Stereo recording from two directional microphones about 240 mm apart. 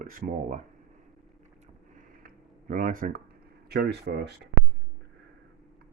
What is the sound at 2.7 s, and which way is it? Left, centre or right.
Speech, right.